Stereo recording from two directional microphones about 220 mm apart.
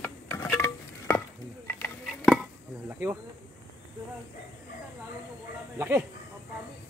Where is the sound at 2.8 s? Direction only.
10° right (ahead or behind).